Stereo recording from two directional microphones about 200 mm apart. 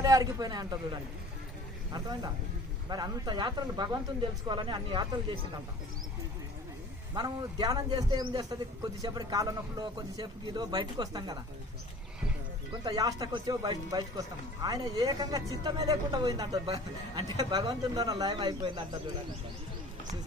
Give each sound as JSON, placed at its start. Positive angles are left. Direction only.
{"t": 0.0, "sound": "a man's voice", "side_deg": -20}
{"t": 7.2, "sound": "a man's voice", "side_deg": -20}
{"t": 12.8, "sound": "a man's voice", "side_deg": -20}